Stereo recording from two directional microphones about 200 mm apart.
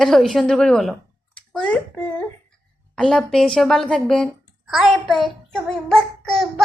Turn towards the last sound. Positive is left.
turn(degrees=0)  # may be behind; listen again after turning